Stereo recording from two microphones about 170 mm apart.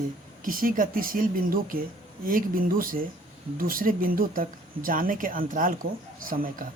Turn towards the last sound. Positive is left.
turn(degrees=-55)  # may be behind; listen again after turning